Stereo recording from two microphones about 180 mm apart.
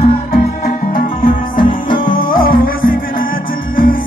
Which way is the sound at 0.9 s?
50° left (ahead or behind).